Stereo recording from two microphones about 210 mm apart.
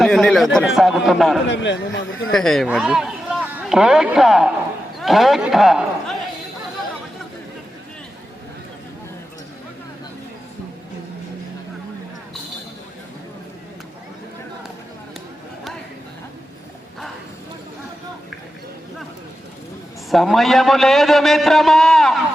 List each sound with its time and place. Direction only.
0.0 s a man's voice: centre (ahead or behind)
1.5 s a man's voice: 60° left (ahead or behind)
2.3 s a man's voice: centre (ahead or behind)
20.1 s a man's voice: centre (ahead or behind)